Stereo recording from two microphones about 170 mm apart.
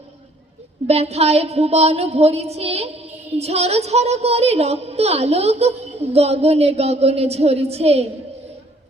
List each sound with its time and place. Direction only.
0.9 s a woman's voice: 40° right (ahead or behind)